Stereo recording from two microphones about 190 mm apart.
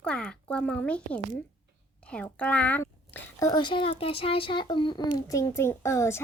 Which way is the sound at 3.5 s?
25° left (ahead or behind).